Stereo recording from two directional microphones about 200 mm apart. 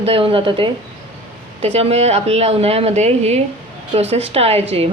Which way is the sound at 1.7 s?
30° right (ahead or behind).